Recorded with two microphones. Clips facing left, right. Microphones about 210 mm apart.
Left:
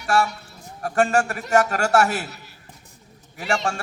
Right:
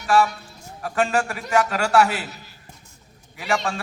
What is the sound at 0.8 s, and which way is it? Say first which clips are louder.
A man's voice: left 2 dB; 45° left (ahead or behind).